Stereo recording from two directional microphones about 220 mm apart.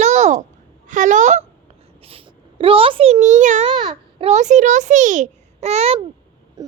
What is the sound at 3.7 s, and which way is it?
A child's voice, 20° right (ahead or behind).